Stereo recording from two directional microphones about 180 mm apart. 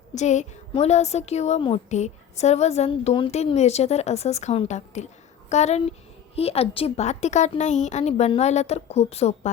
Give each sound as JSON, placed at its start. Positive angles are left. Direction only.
{"t": 0.1, "sound": "a woman's voice", "side_deg": 40}